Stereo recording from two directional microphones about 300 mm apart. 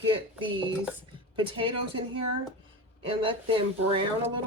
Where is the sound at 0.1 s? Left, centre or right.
Centre.